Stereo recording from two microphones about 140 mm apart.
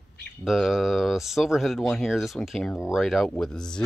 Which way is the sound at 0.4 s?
Centre (ahead or behind).